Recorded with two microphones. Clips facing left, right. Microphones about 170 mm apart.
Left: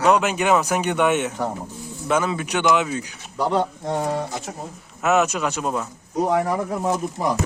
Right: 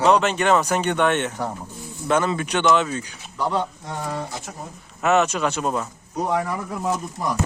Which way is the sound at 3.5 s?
40° left (ahead or behind).